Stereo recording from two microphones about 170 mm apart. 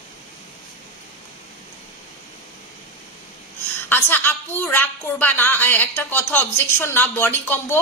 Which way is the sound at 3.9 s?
10° left (ahead or behind).